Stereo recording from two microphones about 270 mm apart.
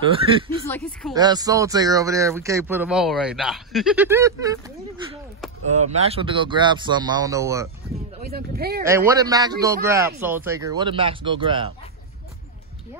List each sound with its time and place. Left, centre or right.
0.7 s speech: centre
1.1 s speech: centre
8.3 s speech: right
8.8 s speech: centre